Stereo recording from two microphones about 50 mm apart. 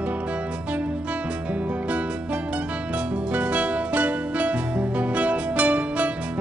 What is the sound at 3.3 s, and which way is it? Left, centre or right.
Music, right.